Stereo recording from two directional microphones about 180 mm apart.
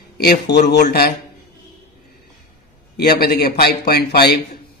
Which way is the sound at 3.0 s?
55° left (ahead or behind).